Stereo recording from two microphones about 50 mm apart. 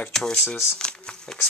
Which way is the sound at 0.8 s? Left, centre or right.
Centre.